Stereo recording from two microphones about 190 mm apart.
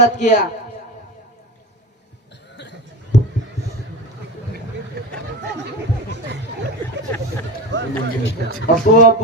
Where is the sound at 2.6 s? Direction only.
65° left (ahead or behind).